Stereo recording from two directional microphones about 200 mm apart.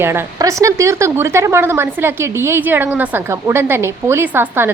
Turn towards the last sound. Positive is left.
turn(degrees=-10)  # may be behind; listen again after turning